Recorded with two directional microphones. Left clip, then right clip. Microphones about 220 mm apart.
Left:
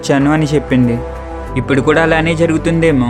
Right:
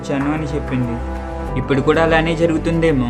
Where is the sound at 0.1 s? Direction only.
40° left (ahead or behind).